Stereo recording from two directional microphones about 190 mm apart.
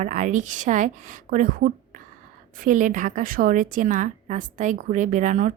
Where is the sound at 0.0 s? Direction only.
40° right (ahead or behind).